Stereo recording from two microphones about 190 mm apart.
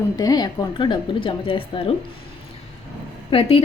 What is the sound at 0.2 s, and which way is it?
A woman's voice, 20° left (ahead or behind).